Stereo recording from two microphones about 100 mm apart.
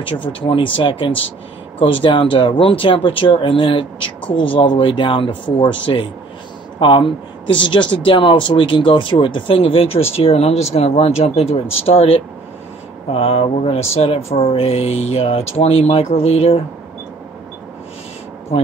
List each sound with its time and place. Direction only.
0.0 s speech: 60° left (ahead or behind)
10.1 s speech: 85° left